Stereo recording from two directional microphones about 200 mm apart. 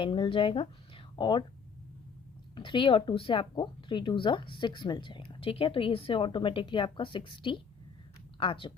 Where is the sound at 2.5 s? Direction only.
25° left (ahead or behind).